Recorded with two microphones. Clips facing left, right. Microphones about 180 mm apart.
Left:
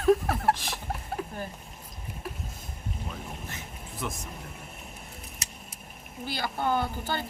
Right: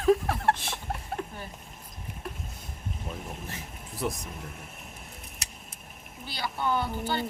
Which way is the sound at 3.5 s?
35° right (ahead or behind).